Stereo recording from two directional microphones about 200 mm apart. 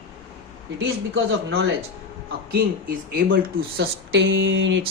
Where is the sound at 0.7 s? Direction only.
60° right (ahead or behind).